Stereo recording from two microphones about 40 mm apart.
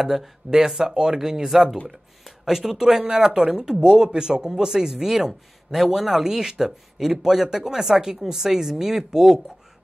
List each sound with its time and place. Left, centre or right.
0.0 s speech: centre